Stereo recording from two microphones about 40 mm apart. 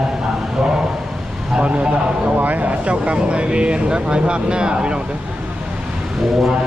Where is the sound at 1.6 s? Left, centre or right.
Right.